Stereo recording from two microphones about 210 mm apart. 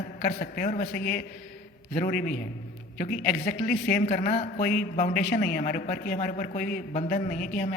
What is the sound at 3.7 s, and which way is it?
Speech, 45° left (ahead or behind).